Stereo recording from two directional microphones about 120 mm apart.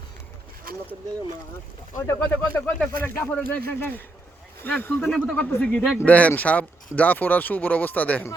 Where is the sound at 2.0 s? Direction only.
20° left (ahead or behind).